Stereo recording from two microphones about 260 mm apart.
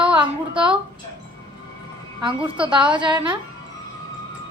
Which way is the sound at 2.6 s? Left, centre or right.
Centre.